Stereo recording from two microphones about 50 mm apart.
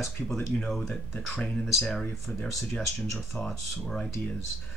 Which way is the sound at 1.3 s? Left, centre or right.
Left.